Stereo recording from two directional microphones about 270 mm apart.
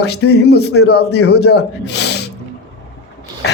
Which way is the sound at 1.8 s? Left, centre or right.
Left.